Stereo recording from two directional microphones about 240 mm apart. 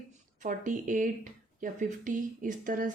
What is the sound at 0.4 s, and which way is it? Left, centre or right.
Speech, right.